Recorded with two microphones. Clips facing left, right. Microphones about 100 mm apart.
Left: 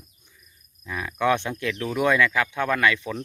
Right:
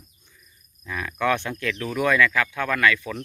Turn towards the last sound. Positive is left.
turn(degrees=20)  # may be behind; listen again after turning